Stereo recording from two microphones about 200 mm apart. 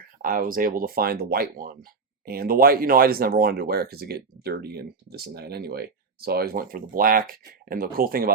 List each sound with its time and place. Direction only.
0.2 s speech: 45° right (ahead or behind)